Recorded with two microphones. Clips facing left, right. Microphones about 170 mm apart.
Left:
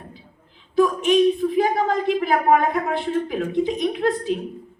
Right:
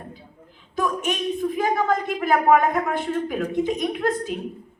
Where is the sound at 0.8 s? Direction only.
45° right (ahead or behind).